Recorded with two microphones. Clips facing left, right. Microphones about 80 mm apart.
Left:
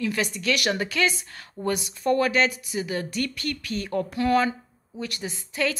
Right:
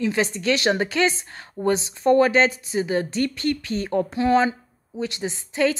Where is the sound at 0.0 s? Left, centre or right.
Right.